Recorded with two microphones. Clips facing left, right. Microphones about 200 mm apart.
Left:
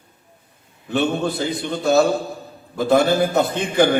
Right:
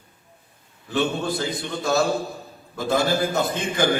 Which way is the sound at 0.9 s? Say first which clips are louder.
Left 3 dB; 60° left (ahead or behind).